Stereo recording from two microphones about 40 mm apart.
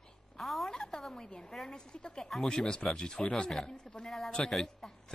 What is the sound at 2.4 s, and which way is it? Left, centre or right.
Speech, centre.